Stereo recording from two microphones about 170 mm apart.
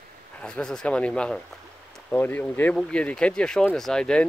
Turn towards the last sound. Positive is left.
turn(degrees=5)  # may be behind; listen again after turning